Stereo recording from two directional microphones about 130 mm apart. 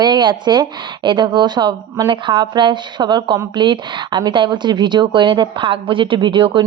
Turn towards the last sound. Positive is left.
turn(degrees=-40)  # may be behind; listen again after turning